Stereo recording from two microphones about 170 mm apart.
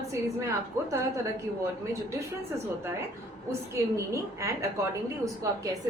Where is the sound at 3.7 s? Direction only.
15° right (ahead or behind).